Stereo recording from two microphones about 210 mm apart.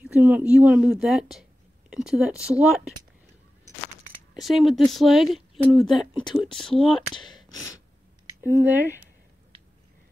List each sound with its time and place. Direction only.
0.0 s a woman's voice: 10° right (ahead or behind)
4.4 s a woman's voice: centre (ahead or behind)
6.8 s speech: 25° left (ahead or behind)
8.5 s speech: 10° right (ahead or behind)